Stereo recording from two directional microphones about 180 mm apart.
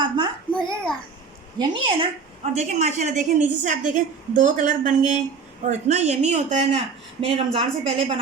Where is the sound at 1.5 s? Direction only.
25° right (ahead or behind).